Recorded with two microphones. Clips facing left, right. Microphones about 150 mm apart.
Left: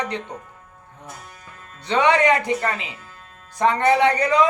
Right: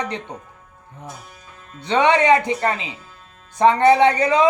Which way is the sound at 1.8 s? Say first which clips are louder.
Right 1 dB; 25° right (ahead or behind).